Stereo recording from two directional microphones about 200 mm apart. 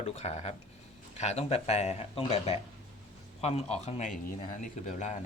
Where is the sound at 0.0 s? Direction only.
35° left (ahead or behind).